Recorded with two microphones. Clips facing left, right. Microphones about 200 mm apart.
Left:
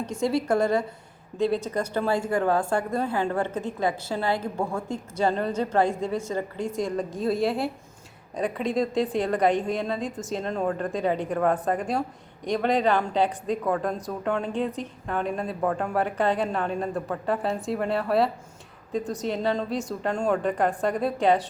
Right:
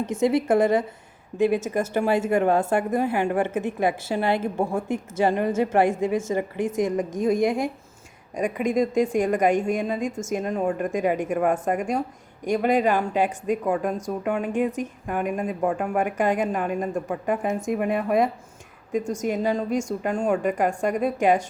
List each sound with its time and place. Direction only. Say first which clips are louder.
0.0 s a woman's voice: right 4 dB; 20° right (ahead or behind)